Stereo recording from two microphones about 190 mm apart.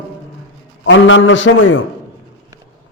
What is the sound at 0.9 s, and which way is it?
Speech, 90° left.